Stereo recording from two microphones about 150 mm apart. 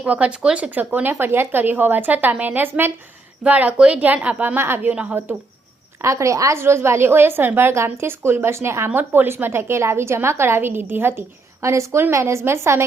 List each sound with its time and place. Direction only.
0.0 s a woman's voice: 10° right (ahead or behind)
6.0 s a woman's voice: 20° right (ahead or behind)